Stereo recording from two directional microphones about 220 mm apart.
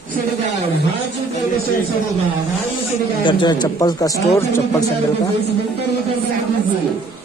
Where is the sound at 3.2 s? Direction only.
20° left (ahead or behind).